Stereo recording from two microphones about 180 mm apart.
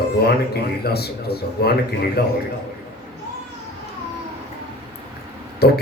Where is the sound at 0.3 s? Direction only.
65° left (ahead or behind).